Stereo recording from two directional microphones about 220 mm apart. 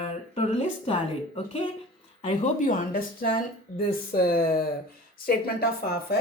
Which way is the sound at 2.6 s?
40° left (ahead or behind).